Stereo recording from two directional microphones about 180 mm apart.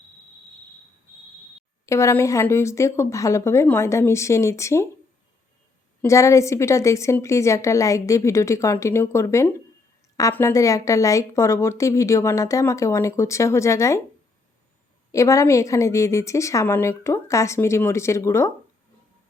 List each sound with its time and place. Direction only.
1.9 s a woman's voice: 15° left (ahead or behind)
6.0 s a woman's voice: 15° left (ahead or behind)
15.1 s a woman's voice: 15° left (ahead or behind)